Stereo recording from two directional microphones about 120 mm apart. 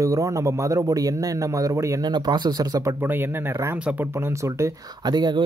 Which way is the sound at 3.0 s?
20° right (ahead or behind).